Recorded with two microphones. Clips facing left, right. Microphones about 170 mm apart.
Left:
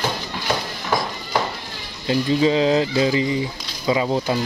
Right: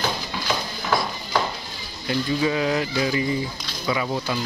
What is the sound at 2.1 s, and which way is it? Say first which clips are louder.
Speech: left 5 dB; 25° left (ahead or behind).